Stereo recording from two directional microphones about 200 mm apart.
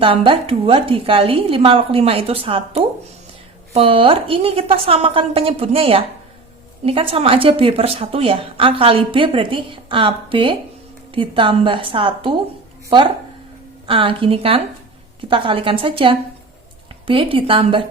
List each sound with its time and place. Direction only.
0.0 s a woman's voice: 25° right (ahead or behind)